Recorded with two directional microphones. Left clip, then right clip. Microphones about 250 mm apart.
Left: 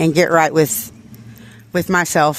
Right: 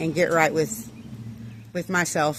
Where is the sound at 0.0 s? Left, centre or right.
Left.